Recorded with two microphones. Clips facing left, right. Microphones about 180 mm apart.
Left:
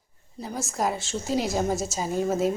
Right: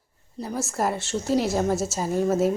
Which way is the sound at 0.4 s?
5° right (ahead or behind).